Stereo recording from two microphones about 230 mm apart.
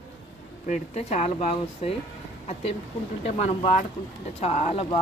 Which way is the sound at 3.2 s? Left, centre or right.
Left.